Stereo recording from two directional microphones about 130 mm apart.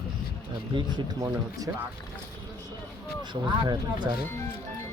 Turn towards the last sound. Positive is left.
turn(degrees=-35)  # may be behind; listen again after turning